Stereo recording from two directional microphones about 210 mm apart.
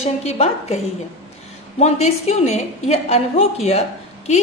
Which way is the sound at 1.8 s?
30° left (ahead or behind).